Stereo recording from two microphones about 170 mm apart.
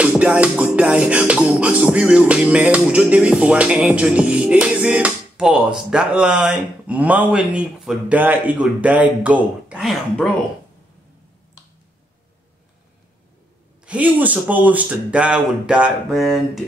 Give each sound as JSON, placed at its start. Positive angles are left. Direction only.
{"t": 0.0, "sound": "music", "side_deg": -5}
{"t": 13.8, "sound": "music", "side_deg": -10}